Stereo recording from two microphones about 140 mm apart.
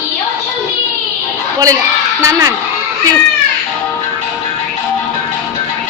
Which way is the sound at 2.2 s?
25° right (ahead or behind).